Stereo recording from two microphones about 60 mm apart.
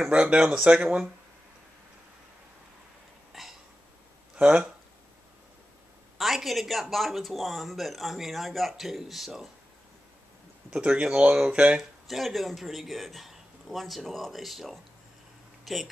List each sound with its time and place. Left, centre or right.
0.1 s speech: centre
3.4 s burping: centre
4.4 s speech: right
6.1 s speech: centre
10.7 s speech: centre
12.1 s speech: centre